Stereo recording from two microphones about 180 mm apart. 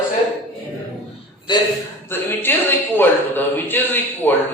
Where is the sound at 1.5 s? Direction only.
25° left (ahead or behind).